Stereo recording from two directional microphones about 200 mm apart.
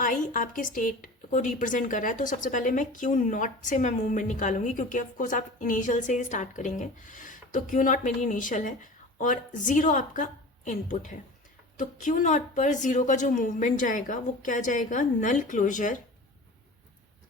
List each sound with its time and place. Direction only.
0.0 s speech: 45° left (ahead or behind)